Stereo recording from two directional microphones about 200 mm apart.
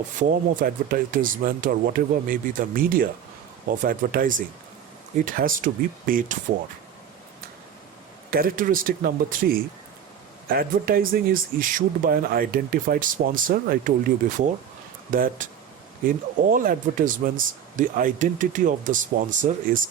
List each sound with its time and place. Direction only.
0.2 s speech: 45° right (ahead or behind)
8.3 s speech: 45° right (ahead or behind)